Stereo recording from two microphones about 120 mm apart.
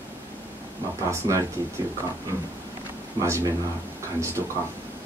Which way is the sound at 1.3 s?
30° right (ahead or behind).